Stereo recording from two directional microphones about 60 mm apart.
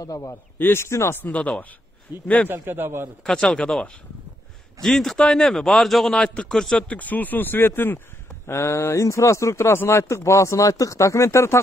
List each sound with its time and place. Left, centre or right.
0.0 s a man's voice: left
0.6 s speech: left
1.2 s speech: left
2.1 s a man's voice: right
3.3 s speech: centre
4.8 s speech: centre
6.1 s speech: centre
6.9 s speech: left
8.5 s speech: left